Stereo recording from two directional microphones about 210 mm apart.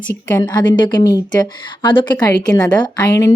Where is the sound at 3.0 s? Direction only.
15° left (ahead or behind).